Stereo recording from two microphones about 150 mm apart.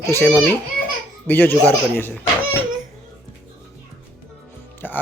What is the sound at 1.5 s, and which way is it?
Speech, 20° right (ahead or behind).